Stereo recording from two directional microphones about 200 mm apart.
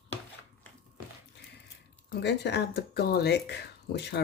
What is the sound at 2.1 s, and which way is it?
Speech, 55° left (ahead or behind).